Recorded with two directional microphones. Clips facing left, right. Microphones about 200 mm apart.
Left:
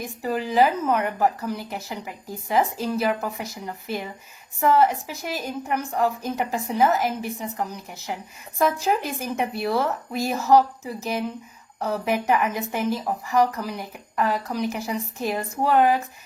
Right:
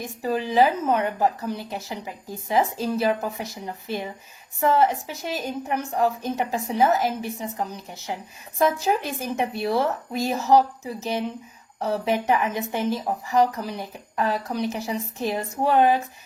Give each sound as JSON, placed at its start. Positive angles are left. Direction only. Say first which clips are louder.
{"t": 0.2, "sound": "a woman's voice", "louder": "even", "side_deg": -20}